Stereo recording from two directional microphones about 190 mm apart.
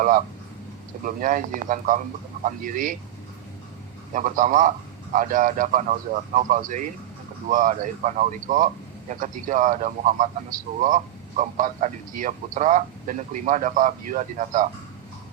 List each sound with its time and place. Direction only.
1.0 s a man's voice: 45° right (ahead or behind)
4.1 s a man's voice: 45° right (ahead or behind)